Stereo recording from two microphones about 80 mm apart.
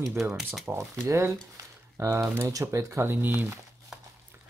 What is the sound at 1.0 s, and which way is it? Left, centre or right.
Speech, right.